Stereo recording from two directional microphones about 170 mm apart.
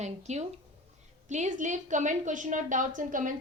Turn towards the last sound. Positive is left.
turn(degrees=-50)  # may be behind; listen again after turning